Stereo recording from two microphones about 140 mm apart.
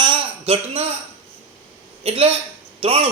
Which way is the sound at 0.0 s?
35° right (ahead or behind).